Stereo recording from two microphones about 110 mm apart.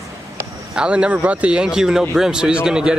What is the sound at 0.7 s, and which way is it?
Speech, 10° right (ahead or behind).